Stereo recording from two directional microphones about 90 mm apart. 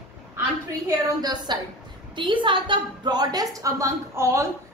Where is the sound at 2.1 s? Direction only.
65° right (ahead or behind); by 4.4 s 35° right (ahead or behind).